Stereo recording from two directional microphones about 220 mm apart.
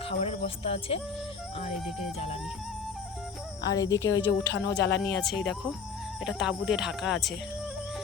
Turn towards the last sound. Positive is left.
turn(degrees=0)  # may be behind; listen again after turning